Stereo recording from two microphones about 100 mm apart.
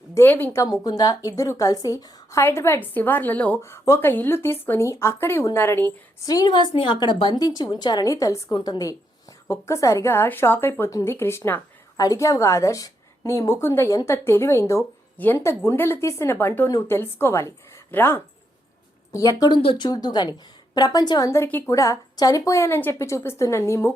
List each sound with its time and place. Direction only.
0.1 s a woman's voice: 20° left (ahead or behind)
0.6 s a woman's voice: 40° left (ahead or behind); by 3.6 s 15° left (ahead or behind)
3.6 s a woman's voice: 25° left (ahead or behind)
6.2 s a woman's voice: 40° left (ahead or behind)
8.5 s a woman's voice: 50° left (ahead or behind)
9.5 s a woman's voice: 30° left (ahead or behind)
11.9 s a woman's voice: 35° left (ahead or behind)
19.9 s a woman's voice: 40° left (ahead or behind)
21.2 s a woman's voice: 25° left (ahead or behind)
21.7 s a woman's voice: 35° left (ahead or behind)